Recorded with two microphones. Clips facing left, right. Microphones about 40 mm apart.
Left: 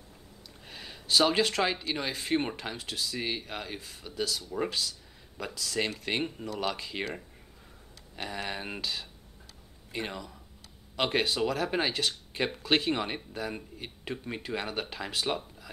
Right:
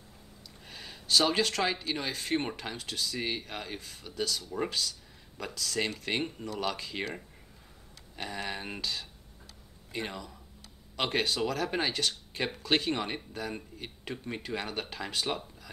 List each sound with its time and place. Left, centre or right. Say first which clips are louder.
0.7 s speech: even; centre